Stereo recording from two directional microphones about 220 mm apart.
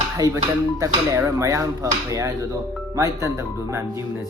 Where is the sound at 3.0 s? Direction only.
15° right (ahead or behind).